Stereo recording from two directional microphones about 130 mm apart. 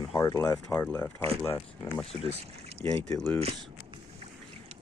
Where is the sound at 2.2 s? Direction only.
55° right (ahead or behind).